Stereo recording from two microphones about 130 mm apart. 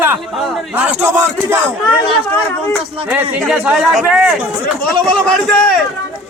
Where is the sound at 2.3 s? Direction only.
10° left (ahead or behind).